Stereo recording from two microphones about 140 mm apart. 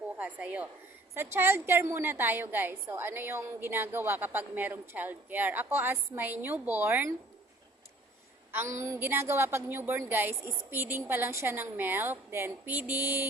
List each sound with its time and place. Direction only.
0.2 s a woman's voice: 10° right (ahead or behind)
8.5 s a woman's voice: 20° right (ahead or behind)